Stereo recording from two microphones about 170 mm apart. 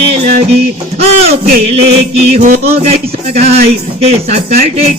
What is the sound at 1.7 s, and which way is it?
Speech, 35° right (ahead or behind).